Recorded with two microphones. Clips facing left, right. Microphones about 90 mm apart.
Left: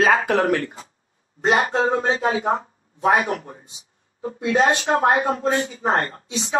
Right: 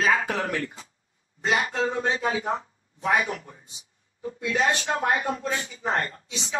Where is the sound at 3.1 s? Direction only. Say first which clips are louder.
Left 4 dB; 50° left (ahead or behind).